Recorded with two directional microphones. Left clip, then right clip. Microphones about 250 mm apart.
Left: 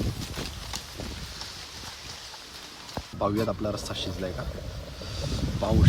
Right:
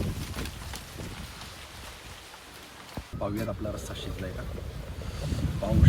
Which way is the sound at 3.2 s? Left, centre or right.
Centre.